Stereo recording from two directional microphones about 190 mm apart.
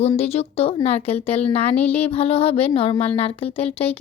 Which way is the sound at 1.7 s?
10° left (ahead or behind).